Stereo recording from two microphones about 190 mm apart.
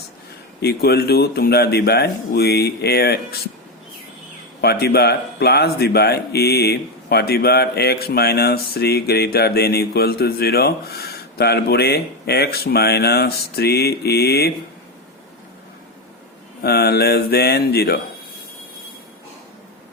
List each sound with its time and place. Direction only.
0.6 s speech: 55° left (ahead or behind)
4.6 s speech: 55° left (ahead or behind)
16.6 s speech: 55° left (ahead or behind)